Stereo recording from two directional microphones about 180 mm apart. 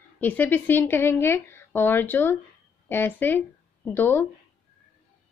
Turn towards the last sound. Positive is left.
turn(degrees=10)  # may be behind; listen again after turning